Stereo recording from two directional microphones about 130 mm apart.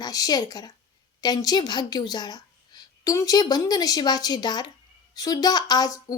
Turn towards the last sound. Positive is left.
turn(degrees=30)  # may be behind; listen again after turning